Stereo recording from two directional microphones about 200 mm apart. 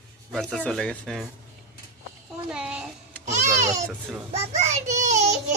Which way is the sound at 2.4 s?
5° right (ahead or behind).